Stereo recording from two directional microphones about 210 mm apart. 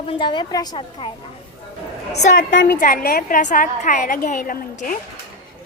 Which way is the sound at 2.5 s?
60° left (ahead or behind).